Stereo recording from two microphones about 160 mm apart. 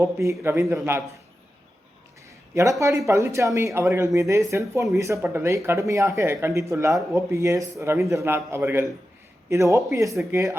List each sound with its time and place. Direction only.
0.0 s a man's voice: 20° right (ahead or behind)
2.6 s a man's voice: 20° right (ahead or behind)